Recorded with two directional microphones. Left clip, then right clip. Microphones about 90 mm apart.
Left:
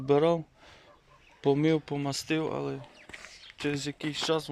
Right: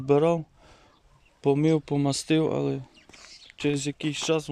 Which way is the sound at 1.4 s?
20° right (ahead or behind).